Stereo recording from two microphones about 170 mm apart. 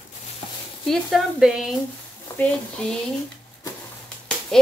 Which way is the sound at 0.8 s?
Centre (ahead or behind).